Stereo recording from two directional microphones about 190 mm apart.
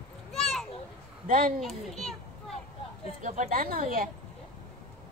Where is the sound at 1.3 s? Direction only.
50° right (ahead or behind).